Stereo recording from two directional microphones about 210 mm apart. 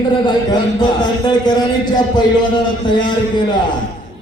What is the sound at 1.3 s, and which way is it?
A man's voice, 20° left (ahead or behind).